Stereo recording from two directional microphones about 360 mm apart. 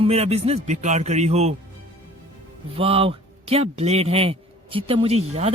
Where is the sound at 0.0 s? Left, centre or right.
Centre.